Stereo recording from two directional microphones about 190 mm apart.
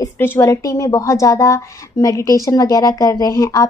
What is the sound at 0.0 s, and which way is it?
A woman's voice, 15° left (ahead or behind).